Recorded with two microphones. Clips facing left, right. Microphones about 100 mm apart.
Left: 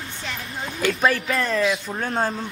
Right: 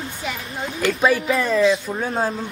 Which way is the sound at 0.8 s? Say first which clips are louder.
Right 2 dB; centre (ahead or behind).